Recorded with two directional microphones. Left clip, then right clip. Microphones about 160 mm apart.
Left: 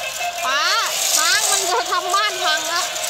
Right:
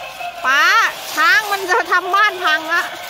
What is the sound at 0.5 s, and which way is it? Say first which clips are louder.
Vehicle: right 7 dB; 55° right (ahead or behind).